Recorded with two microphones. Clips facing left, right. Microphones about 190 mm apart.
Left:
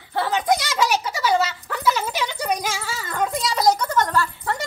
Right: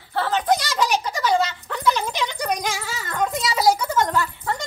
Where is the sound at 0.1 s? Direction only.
10° left (ahead or behind).